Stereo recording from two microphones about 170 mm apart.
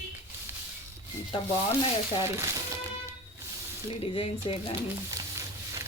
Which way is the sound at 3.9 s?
35° left (ahead or behind).